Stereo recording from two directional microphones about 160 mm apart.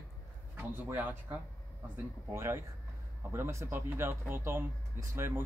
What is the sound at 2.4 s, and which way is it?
Speech, 15° right (ahead or behind).